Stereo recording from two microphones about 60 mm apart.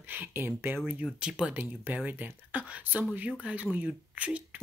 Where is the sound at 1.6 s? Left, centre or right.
Right.